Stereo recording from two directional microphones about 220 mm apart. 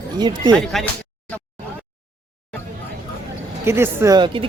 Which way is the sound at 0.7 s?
Centre (ahead or behind).